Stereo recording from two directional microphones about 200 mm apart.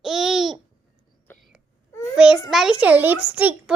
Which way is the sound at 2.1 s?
5° right (ahead or behind).